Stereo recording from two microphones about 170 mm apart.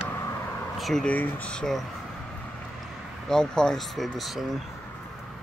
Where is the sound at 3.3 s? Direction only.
5° left (ahead or behind).